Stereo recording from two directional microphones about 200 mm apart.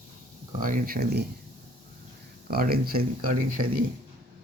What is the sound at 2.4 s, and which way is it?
Speech, 50° right (ahead or behind).